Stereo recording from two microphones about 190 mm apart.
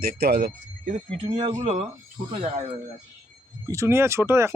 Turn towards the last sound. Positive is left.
turn(degrees=-15)  # may be behind; listen again after turning